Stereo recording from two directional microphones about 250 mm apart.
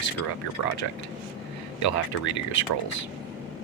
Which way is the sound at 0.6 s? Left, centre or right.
Left.